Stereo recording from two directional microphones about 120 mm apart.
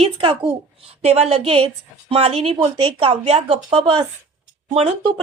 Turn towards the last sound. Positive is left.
turn(degrees=-50)  # may be behind; listen again after turning